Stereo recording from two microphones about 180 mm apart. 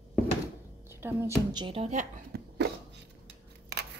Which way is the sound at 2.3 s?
65° right (ahead or behind).